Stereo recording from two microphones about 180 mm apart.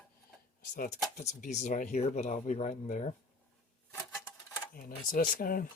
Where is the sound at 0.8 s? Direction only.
40° left (ahead or behind).